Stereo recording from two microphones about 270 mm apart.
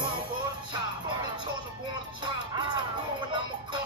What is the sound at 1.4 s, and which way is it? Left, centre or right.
Music, left.